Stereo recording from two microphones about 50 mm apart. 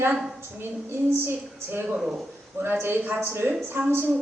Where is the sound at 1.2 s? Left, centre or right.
Right.